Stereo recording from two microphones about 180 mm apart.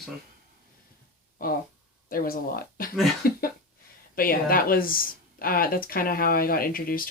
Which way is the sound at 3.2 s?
55° left (ahead or behind).